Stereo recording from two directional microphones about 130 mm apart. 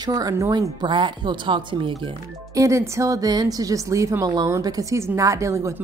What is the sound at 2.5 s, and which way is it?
A woman's voice, 25° right (ahead or behind).